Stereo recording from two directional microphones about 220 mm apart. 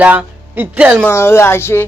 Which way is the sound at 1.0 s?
10° left (ahead or behind).